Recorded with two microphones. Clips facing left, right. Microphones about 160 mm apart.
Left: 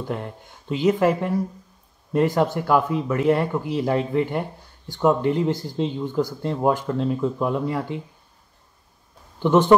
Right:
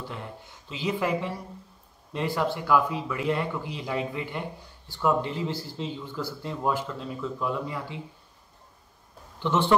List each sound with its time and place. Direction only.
0.0 s speech: 55° left (ahead or behind)
9.4 s speech: 45° left (ahead or behind)